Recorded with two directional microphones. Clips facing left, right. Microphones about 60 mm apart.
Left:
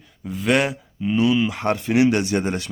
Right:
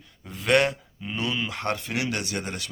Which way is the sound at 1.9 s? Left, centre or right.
Left.